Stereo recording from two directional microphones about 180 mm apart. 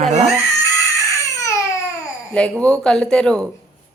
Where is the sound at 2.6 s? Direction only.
5° left (ahead or behind).